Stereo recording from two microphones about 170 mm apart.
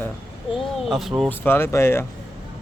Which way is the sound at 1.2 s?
10° left (ahead or behind).